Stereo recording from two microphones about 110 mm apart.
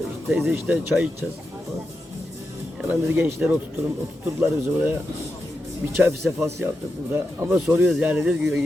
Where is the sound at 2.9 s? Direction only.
20° right (ahead or behind).